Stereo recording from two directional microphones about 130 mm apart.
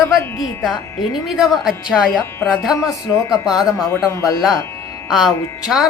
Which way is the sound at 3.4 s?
5° right (ahead or behind).